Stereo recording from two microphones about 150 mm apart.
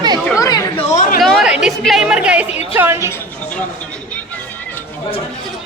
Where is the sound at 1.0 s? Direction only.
65° left (ahead or behind).